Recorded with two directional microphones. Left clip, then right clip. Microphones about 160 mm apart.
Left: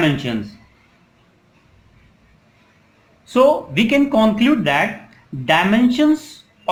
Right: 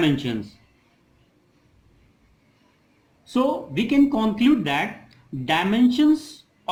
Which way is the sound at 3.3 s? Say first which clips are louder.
Left 9 dB; 35° right (ahead or behind).